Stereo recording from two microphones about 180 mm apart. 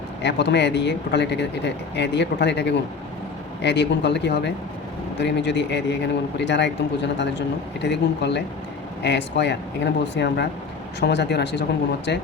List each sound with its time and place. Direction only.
0.2 s speech: 75° left (ahead or behind)